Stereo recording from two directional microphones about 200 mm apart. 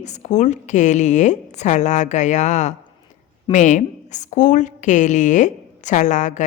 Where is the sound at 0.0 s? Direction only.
35° left (ahead or behind).